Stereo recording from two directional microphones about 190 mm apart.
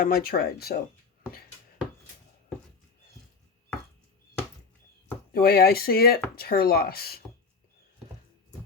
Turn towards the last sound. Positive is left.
turn(degrees=55)  # may be behind; listen again after turning